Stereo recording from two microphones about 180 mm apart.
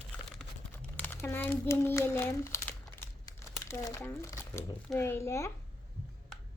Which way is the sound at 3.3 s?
20° left (ahead or behind).